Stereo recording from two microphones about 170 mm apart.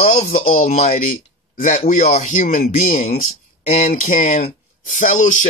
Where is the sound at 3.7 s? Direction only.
40° left (ahead or behind).